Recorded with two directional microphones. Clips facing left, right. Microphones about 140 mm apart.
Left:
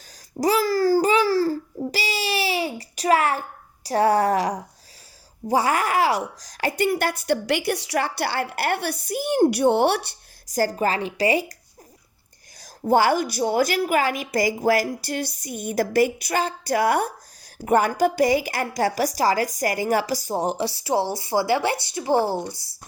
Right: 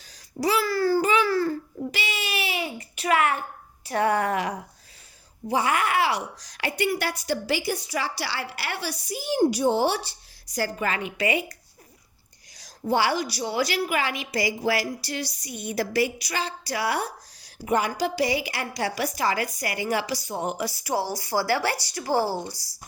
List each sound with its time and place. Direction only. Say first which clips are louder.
0.3 s babbling: left 4 dB; 40° left (ahead or behind)
3.8 s a woman's voice: left 5 dB; 35° left (ahead or behind); by 10.2 s 65° left (ahead or behind)
10.5 s a woman's voice: left 5 dB; 40° left (ahead or behind)
12.5 s a woman's voice: left 5 dB; 45° left (ahead or behind); by 22.5 s 20° left (ahead or behind)